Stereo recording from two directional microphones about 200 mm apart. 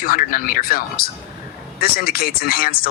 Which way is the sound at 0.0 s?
45° left (ahead or behind).